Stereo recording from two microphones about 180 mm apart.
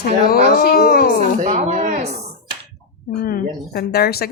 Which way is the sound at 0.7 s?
55° left (ahead or behind).